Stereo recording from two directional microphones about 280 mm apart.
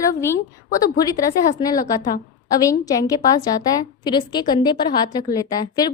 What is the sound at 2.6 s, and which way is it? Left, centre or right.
A woman's voice, centre.